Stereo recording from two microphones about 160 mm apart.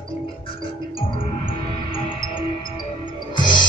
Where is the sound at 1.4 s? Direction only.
30° left (ahead or behind).